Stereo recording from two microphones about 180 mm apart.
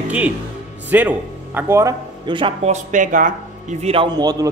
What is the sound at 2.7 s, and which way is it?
A man's voice, 45° right (ahead or behind).